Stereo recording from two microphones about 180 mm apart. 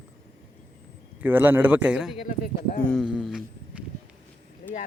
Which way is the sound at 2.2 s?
55° left (ahead or behind).